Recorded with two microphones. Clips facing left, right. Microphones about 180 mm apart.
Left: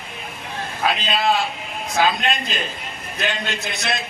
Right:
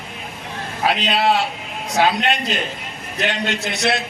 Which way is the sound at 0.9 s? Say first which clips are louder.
Right 3 dB; 70° right (ahead or behind).